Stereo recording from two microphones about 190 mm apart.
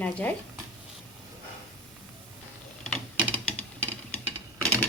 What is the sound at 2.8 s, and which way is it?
Typewriter, 5° left (ahead or behind).